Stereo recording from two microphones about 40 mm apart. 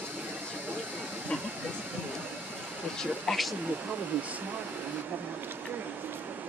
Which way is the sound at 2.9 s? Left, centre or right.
Centre.